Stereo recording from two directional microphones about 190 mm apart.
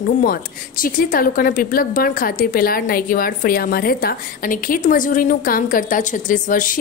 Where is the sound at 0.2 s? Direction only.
50° left (ahead or behind).